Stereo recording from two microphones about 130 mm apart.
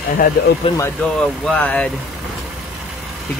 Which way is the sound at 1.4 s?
10° left (ahead or behind).